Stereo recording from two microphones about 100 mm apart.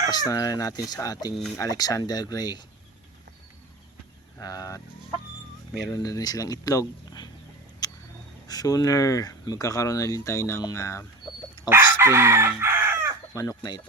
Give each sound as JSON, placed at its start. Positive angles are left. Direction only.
{"t": 0.1, "sound": "speech", "side_deg": 40}
{"t": 4.4, "sound": "speech", "side_deg": 40}
{"t": 5.9, "sound": "speech", "side_deg": 35}
{"t": 7.8, "sound": "a sound", "side_deg": 45}
{"t": 8.4, "sound": "speech", "side_deg": 40}
{"t": 11.7, "sound": "chicken", "side_deg": -25}
{"t": 13.3, "sound": "speech", "side_deg": 35}